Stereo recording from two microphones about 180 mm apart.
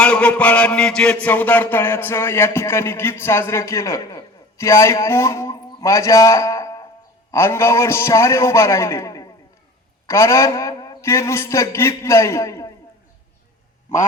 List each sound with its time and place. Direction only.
0.0 s mantra: 5° left (ahead or behind)